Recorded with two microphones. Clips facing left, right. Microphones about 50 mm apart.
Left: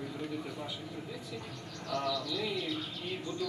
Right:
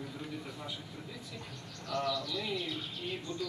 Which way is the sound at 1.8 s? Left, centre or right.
Centre.